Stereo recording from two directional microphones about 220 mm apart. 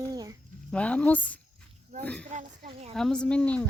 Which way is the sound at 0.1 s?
15° right (ahead or behind).